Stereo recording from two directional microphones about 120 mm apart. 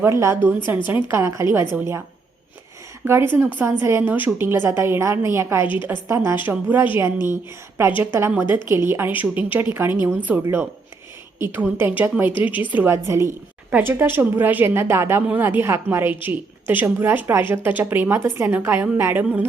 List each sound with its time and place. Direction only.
0.0 s a woman's voice: 25° right (ahead or behind)
3.0 s a woman's voice: 20° right (ahead or behind)